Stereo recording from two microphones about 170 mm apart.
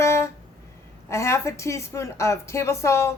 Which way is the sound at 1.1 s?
15° left (ahead or behind).